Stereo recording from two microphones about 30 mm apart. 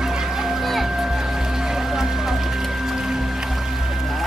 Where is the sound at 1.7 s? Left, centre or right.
Centre.